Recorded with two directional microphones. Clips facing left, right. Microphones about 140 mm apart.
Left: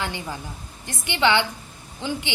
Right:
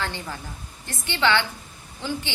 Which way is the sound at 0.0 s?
15° left (ahead or behind).